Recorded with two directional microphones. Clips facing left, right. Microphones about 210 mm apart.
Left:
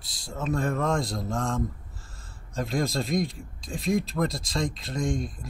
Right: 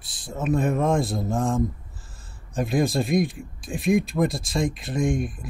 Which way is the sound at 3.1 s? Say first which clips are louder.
Right 5 dB; 20° right (ahead or behind).